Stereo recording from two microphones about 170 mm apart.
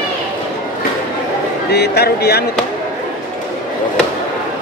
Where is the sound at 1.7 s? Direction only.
70° left (ahead or behind).